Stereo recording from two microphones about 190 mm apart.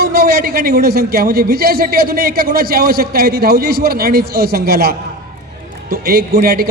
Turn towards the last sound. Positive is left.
turn(degrees=-50)  # may be behind; listen again after turning